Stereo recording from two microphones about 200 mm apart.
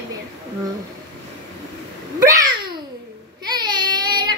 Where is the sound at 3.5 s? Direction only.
20° right (ahead or behind).